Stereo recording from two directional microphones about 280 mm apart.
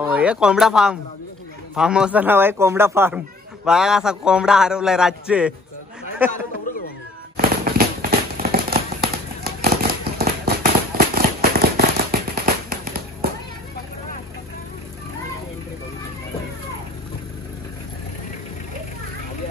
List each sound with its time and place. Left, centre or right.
0.0 s a man's voice: centre
7.3 s fireworks: right
11.7 s firecracker: right